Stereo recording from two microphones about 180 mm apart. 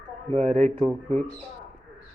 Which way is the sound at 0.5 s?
35° right (ahead or behind).